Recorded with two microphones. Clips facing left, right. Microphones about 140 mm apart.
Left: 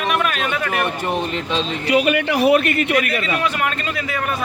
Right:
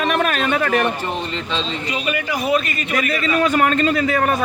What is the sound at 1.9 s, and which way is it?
A man's voice, 65° left (ahead or behind).